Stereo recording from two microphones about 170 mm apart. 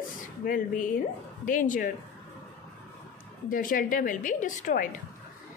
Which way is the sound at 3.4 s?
55° left (ahead or behind).